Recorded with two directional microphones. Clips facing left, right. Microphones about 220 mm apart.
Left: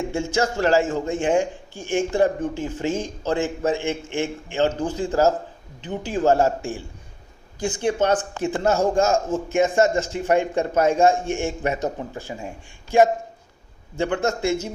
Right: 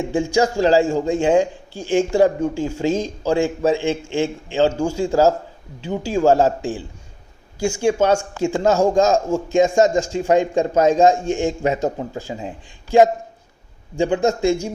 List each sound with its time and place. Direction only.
0.1 s speech: 15° right (ahead or behind)
7.6 s speech: 10° right (ahead or behind)